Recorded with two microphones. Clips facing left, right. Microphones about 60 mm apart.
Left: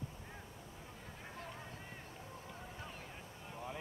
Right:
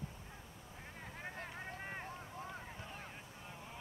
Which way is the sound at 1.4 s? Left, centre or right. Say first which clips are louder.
Right 2 dB; right.